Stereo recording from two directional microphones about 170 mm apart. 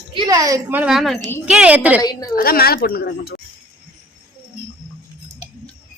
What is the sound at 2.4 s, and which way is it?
Speech, 60° left (ahead or behind).